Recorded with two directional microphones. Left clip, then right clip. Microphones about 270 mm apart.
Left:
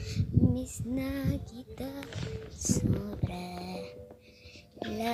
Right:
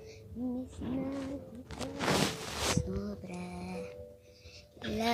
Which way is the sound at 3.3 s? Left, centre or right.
Centre.